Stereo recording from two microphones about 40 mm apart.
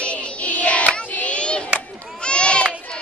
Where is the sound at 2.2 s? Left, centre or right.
Left.